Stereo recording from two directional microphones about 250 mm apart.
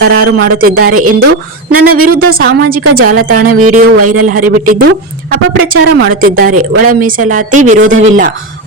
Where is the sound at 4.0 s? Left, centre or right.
Right.